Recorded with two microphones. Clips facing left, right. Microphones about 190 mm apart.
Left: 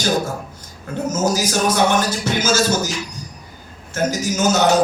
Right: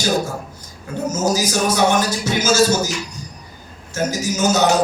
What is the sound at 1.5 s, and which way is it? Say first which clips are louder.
Music: even; 55° left (ahead or behind).